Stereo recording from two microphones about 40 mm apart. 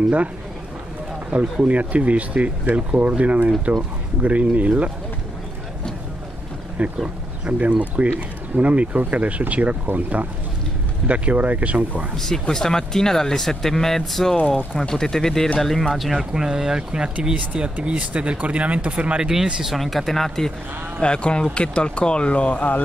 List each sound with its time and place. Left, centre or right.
1.3 s speech: right
6.8 s speech: right
12.2 s speech: centre
15.9 s speech: centre
16.3 s speech: centre
17.5 s speech: right
19.2 s speech: centre
19.6 s speech: centre
21.0 s speech: left